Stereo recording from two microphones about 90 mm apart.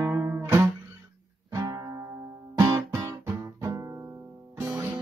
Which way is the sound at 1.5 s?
45° right (ahead or behind).